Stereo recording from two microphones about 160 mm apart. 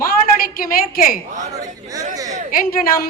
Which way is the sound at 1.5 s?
20° right (ahead or behind).